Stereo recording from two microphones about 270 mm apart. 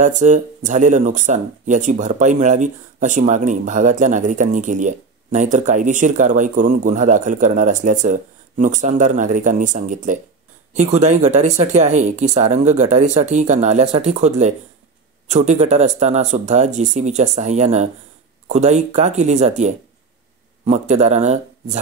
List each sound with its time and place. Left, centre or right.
0.0 s speech: right